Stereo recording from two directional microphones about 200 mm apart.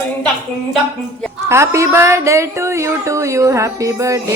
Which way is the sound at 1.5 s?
15° right (ahead or behind).